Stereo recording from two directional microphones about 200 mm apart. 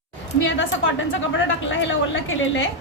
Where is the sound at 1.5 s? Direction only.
75° left (ahead or behind).